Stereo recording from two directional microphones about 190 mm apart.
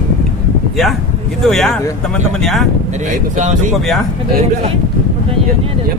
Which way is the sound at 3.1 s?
40° right (ahead or behind).